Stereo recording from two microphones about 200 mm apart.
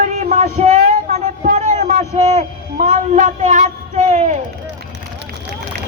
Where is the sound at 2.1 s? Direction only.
35° right (ahead or behind).